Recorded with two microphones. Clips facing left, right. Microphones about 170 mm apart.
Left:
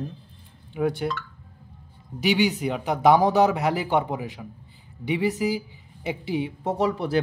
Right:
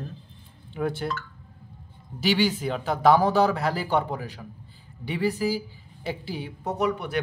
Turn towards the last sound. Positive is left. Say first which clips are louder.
# left 3 dB
turn(degrees=30)  # may be behind; listen again after turning